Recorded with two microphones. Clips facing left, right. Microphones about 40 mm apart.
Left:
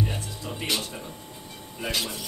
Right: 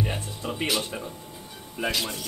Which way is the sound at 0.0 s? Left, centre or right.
Right.